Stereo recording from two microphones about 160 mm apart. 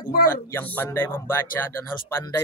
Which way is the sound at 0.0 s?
65° left (ahead or behind).